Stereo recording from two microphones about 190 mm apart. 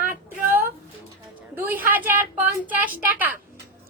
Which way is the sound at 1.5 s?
10° right (ahead or behind).